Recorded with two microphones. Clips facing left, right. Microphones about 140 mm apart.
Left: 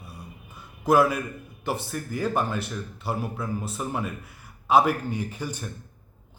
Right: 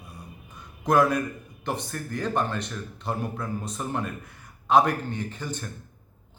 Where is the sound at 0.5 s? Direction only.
5° left (ahead or behind).